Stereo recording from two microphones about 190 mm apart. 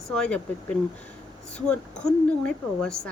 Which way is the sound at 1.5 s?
5° left (ahead or behind).